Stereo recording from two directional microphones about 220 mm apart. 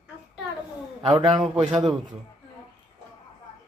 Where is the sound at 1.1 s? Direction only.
20° right (ahead or behind).